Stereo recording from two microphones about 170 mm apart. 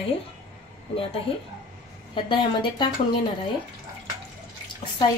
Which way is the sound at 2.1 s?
30° left (ahead or behind).